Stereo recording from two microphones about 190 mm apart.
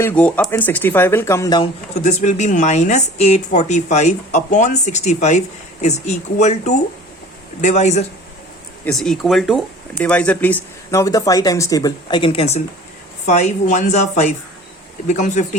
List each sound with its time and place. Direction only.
0.0 s speech: 10° left (ahead or behind)
2.0 s a woman's voice: 40° left (ahead or behind)
8.8 s a woman's voice: 5° left (ahead or behind); by 15.4 s 40° left (ahead or behind)